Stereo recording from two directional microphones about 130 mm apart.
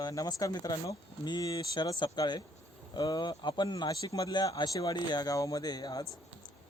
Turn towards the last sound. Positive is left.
turn(degrees=30)  # may be behind; listen again after turning